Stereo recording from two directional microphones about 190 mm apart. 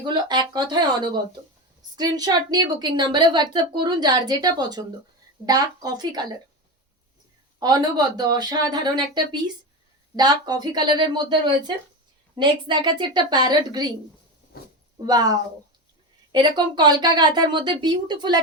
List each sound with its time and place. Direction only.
0.0 s a woman's voice: 25° right (ahead or behind)
7.6 s a woman's voice: 20° right (ahead or behind)
14.5 s speech: 55° left (ahead or behind)
15.0 s a woman's voice: 20° right (ahead or behind)